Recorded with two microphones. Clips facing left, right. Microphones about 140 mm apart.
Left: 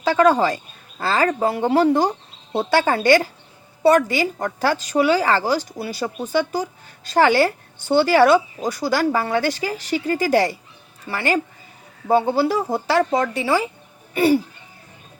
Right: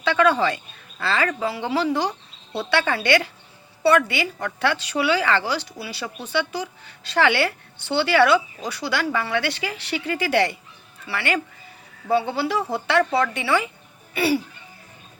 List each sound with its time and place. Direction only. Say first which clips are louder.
0.0 s a woman's voice: left 3 dB; 40° left (ahead or behind)
14.1 s speech: left 5 dB; 45° left (ahead or behind)